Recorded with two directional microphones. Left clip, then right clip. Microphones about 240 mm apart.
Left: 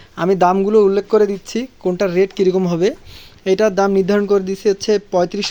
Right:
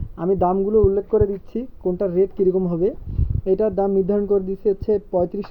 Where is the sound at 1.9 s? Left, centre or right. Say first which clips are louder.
Left 4 dB; centre.